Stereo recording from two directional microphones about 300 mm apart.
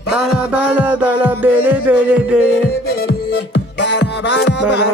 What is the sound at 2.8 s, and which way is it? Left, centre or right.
Music, left.